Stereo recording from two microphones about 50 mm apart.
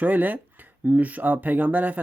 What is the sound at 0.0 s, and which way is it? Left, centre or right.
Speech, right.